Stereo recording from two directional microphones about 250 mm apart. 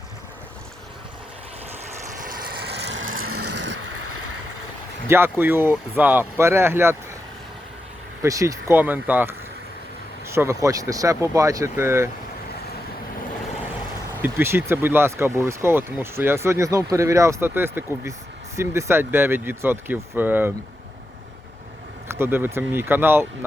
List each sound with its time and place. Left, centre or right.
2.1 s vehicle: right
3.6 s vehicle: right
5.0 s speech: centre
8.2 s speech: centre
14.2 s speech: centre
22.1 s speech: centre